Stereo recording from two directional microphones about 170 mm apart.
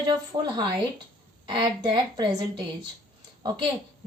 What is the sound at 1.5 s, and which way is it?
A woman's voice, 25° right (ahead or behind).